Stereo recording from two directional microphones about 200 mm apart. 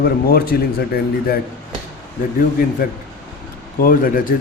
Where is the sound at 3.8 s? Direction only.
45° left (ahead or behind).